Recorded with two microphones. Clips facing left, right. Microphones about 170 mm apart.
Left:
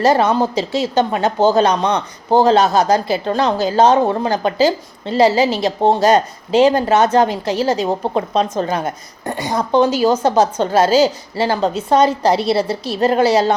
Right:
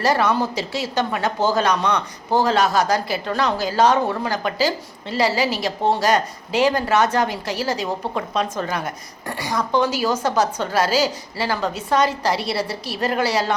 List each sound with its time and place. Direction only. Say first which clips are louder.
0.0 s a woman's voice: left 5 dB; 25° left (ahead or behind)